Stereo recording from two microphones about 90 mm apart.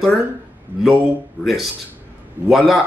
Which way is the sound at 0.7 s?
20° right (ahead or behind).